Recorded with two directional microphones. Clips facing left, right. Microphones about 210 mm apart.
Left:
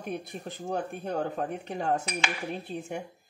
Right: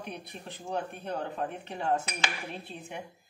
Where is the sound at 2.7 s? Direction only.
45° left (ahead or behind).